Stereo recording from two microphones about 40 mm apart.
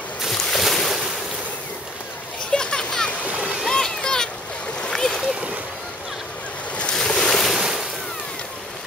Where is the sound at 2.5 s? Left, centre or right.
Left.